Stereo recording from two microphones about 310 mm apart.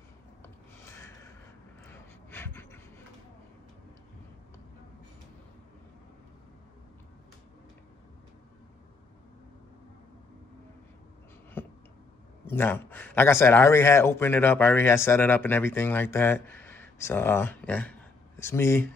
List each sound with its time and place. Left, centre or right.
0.8 s gasp: centre
1.9 s pant: centre
11.6 s a sound: centre
12.4 s speech: centre